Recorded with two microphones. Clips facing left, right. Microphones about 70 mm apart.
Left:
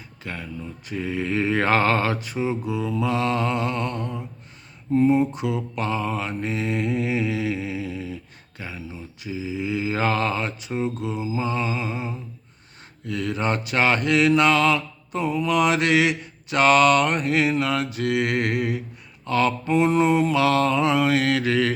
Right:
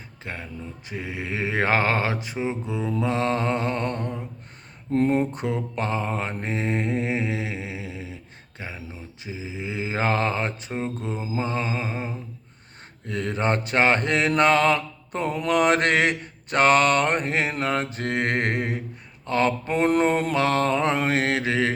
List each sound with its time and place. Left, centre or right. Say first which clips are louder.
0.2 s speech: left 1 dB; right
0.9 s mantra: left 6 dB; centre; by 4.2 s right
4.9 s a sound: left 3 dB; right
5.3 s mantra: left 1 dB; right